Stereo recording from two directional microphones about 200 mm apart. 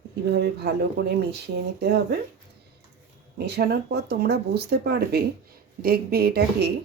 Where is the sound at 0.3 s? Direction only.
55° right (ahead or behind).